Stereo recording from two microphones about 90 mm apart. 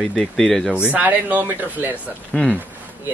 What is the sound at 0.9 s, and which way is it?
Speech, 20° right (ahead or behind).